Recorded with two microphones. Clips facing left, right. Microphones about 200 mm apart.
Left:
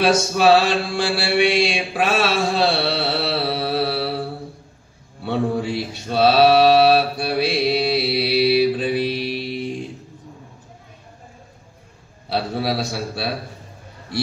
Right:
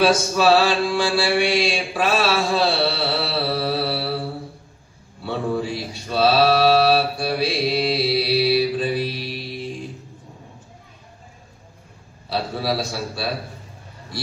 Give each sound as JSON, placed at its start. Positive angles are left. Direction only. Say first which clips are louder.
{"t": 0.0, "sound": "mantra", "louder": "left 1 dB", "side_deg": 60}
{"t": 5.2, "sound": "a sound", "louder": "left 2 dB", "side_deg": 60}
{"t": 12.3, "sound": "a man's voice", "louder": "left 1 dB", "side_deg": 60}